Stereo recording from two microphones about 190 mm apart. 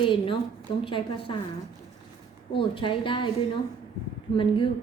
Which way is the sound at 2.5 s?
25° left (ahead or behind).